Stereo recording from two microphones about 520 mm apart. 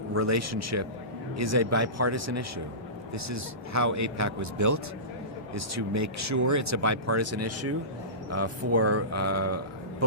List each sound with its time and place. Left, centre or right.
0.1 s speech: right